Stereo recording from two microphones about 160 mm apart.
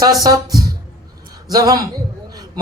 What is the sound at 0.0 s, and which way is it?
A man's voice, 20° right (ahead or behind).